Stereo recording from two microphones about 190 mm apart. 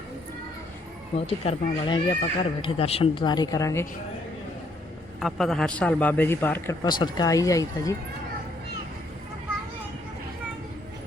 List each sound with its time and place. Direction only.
1.1 s speech: 25° left (ahead or behind)
5.2 s a man's voice: centre (ahead or behind)
6.8 s a man's voice: 20° left (ahead or behind)